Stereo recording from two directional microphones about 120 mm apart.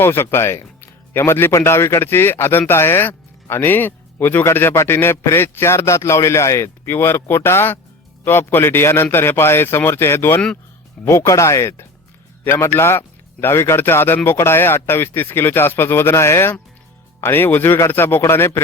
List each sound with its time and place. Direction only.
0.0 s speech: 20° left (ahead or behind)